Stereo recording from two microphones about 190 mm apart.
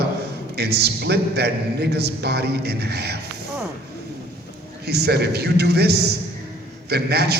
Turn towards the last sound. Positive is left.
turn(degrees=-55)  # may be behind; listen again after turning